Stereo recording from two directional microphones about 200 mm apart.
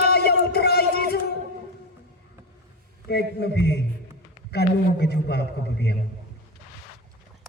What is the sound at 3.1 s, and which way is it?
A man's voice, 55° left (ahead or behind).